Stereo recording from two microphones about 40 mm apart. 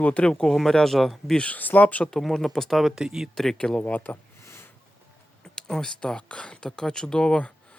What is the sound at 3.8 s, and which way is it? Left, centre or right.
Speech, left.